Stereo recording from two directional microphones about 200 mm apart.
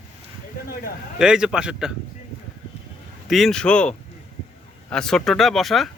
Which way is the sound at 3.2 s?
Centre (ahead or behind).